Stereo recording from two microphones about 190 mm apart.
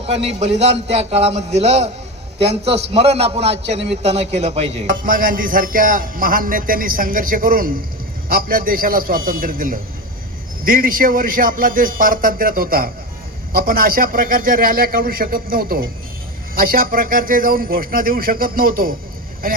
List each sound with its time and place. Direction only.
0.0 s a man's voice: 35° right (ahead or behind)